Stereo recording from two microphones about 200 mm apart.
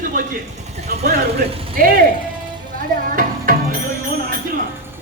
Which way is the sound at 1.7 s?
45° right (ahead or behind).